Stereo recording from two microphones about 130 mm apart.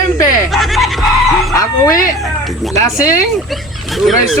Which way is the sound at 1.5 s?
25° left (ahead or behind).